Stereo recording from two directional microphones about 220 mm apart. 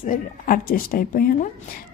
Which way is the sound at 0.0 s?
40° left (ahead or behind).